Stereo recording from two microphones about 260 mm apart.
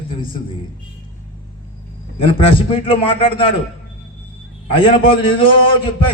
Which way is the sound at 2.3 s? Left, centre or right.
Left.